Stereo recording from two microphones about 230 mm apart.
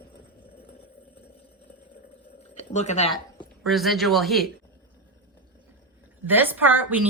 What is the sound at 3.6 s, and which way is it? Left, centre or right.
Speech, centre.